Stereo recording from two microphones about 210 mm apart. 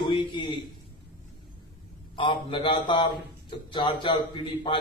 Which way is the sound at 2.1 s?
25° left (ahead or behind).